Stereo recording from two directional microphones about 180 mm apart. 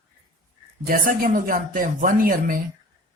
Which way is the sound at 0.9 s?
50° right (ahead or behind).